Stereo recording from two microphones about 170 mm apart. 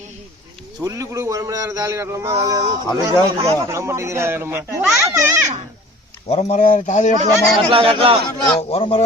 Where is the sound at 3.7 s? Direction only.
15° right (ahead or behind).